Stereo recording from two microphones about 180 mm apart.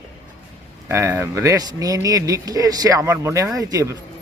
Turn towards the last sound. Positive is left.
turn(degrees=-20)  # may be behind; listen again after turning